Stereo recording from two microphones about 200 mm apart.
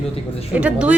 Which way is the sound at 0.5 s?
5° right (ahead or behind).